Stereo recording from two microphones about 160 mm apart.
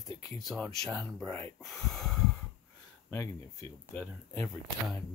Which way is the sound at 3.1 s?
15° left (ahead or behind).